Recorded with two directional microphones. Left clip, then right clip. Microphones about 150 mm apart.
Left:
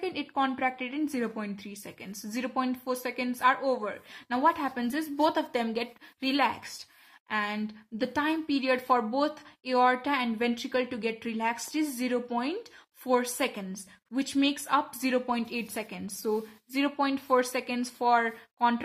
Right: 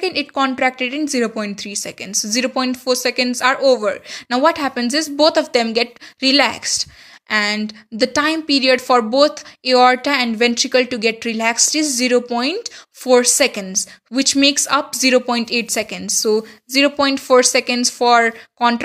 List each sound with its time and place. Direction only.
0.0 s a woman's voice: 25° right (ahead or behind)